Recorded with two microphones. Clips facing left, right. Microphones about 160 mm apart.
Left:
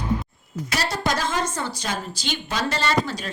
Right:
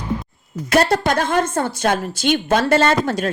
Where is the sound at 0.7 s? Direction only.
55° right (ahead or behind).